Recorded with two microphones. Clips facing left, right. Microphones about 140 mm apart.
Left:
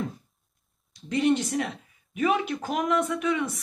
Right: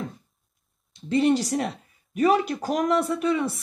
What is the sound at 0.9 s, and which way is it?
Speech, 30° right (ahead or behind).